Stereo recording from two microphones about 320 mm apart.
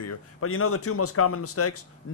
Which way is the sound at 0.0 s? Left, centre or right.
Left.